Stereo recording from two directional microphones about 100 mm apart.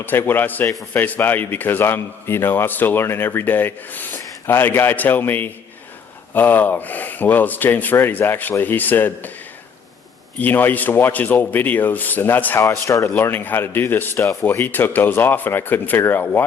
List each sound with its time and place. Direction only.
0.0 s a man's voice: 20° left (ahead or behind)
10.3 s speech: 20° left (ahead or behind)
12.5 s speech: 30° left (ahead or behind)
13.1 s a man's voice: 20° left (ahead or behind)